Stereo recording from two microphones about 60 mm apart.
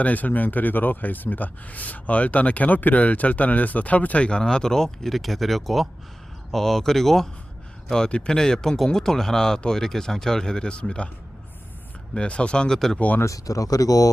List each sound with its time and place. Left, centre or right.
0.0 s speech: left
12.1 s speech: centre
13.2 s speech: left